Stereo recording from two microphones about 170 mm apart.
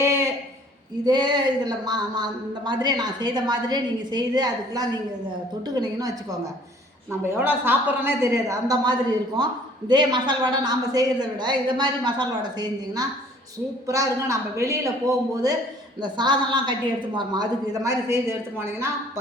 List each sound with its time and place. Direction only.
1.0 s a woman's voice: 25° right (ahead or behind)
7.3 s a woman's voice: 10° right (ahead or behind)